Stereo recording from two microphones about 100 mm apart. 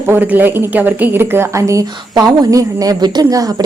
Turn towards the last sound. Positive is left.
turn(degrees=-40)  # may be behind; listen again after turning